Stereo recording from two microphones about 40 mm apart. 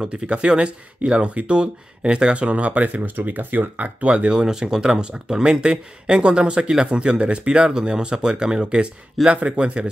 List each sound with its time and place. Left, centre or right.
0.2 s speech: right
3.0 s speech: right
4.1 s speech: right